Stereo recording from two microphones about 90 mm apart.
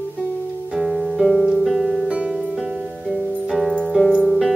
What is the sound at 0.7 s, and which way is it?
Music, centre (ahead or behind).